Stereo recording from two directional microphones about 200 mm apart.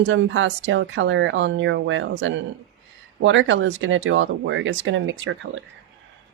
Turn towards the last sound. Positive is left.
turn(degrees=-65)  # may be behind; listen again after turning